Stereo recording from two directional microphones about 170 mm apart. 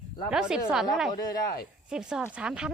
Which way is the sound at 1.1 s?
20° left (ahead or behind).